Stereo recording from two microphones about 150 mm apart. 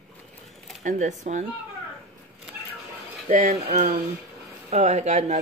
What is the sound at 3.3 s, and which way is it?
Speech, 60° right (ahead or behind).